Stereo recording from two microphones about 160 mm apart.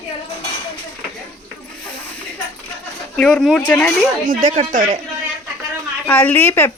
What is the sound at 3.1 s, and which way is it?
Speech, 5° left (ahead or behind).